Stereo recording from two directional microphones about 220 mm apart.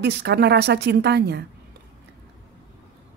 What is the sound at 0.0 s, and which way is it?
Speech, 50° right (ahead or behind).